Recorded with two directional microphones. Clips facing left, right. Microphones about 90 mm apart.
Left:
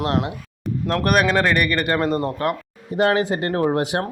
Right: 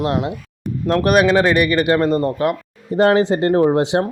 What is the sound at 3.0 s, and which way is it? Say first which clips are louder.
Speech: right 5 dB; 30° right (ahead or behind).